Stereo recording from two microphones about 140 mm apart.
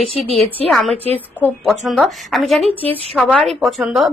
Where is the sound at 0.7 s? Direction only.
Centre (ahead or behind).